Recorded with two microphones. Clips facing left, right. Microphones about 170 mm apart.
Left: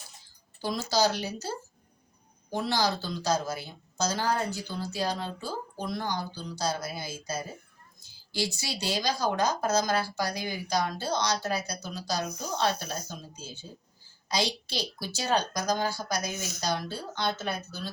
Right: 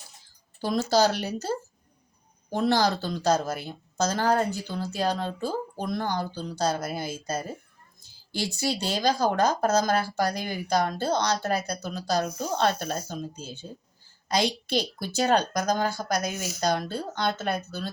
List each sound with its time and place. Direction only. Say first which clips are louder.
0.6 s a woman's voice: right 4 dB; 55° right (ahead or behind)
8.4 s a woman's voice: right 4 dB; 55° right (ahead or behind)